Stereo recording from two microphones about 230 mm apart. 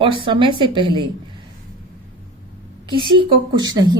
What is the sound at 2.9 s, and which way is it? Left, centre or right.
A woman's voice, right.